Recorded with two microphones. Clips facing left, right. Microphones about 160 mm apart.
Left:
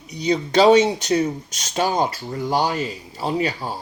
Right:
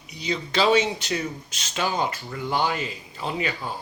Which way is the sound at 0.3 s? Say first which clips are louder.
Left 7 dB; 40° left (ahead or behind).